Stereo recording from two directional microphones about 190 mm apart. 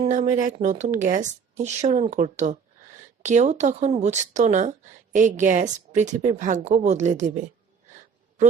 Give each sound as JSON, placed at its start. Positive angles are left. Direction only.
{"t": 0.0, "sound": "a woman's voice", "side_deg": -40}